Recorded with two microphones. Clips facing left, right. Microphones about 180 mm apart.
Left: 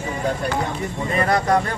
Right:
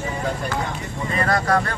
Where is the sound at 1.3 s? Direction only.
20° left (ahead or behind).